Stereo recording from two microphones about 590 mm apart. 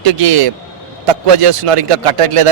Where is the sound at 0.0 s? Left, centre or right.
Right.